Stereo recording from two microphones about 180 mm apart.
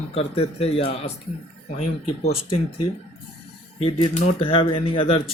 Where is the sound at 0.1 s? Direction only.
35° left (ahead or behind).